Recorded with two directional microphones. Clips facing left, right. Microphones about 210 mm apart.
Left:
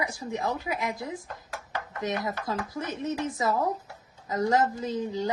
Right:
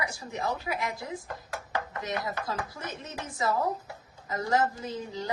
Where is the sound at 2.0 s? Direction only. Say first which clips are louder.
Left 7 dB; 20° left (ahead or behind).